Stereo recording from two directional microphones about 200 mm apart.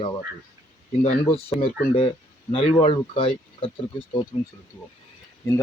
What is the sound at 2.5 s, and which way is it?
Speech, 30° left (ahead or behind).